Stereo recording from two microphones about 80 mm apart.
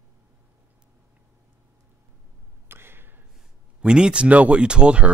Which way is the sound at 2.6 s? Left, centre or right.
Right.